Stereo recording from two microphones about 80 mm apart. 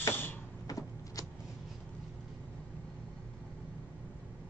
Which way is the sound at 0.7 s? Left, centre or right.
Left.